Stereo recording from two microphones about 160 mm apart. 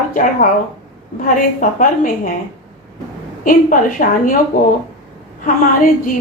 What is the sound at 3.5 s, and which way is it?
Speech, 55° left (ahead or behind).